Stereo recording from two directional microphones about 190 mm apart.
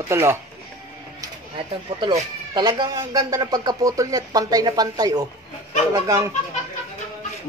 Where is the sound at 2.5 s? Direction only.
20° right (ahead or behind).